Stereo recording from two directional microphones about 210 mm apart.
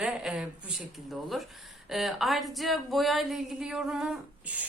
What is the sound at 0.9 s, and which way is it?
A woman's voice, centre (ahead or behind).